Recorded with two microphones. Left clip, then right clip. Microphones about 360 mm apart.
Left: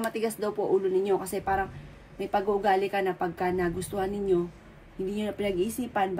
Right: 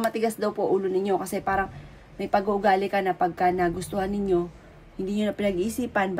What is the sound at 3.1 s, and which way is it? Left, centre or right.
A woman's voice, right.